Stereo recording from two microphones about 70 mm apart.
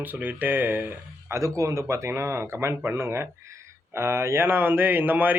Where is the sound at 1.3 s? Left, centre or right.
Right.